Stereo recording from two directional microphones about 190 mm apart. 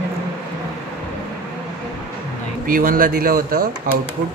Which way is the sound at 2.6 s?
45° right (ahead or behind).